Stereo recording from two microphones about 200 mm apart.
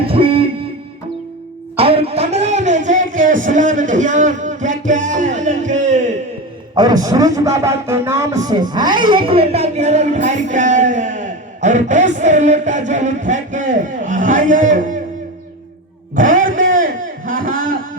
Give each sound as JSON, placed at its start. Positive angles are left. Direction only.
{"t": 0.0, "sound": "music", "side_deg": -25}
{"t": 1.7, "sound": "music", "side_deg": -30}
{"t": 6.7, "sound": "a man's voice", "side_deg": -20}
{"t": 16.1, "sound": "a sound", "side_deg": -40}
{"t": 17.2, "sound": "a man's voice", "side_deg": -45}